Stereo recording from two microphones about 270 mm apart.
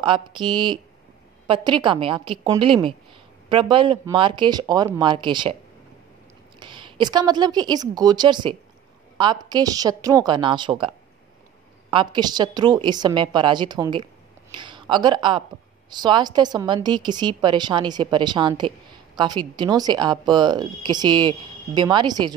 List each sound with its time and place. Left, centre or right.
0.0 s speech: centre
6.6 s speech: centre
11.9 s a woman's voice: centre